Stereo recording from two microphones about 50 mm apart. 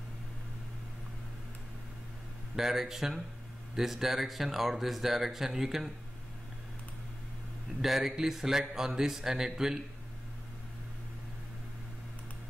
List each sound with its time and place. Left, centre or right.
2.5 s speech: centre
7.8 s speech: centre